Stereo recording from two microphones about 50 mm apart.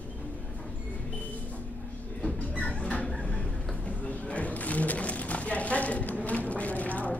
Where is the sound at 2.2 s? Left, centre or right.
Left.